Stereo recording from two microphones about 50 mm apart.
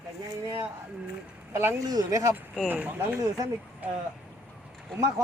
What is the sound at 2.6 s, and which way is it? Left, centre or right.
Speech, right.